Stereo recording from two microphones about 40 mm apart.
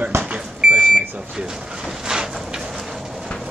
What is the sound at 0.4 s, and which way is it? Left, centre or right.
Microwave oven, centre.